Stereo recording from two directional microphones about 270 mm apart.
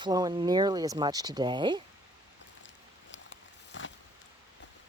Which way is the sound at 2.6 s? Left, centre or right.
Left.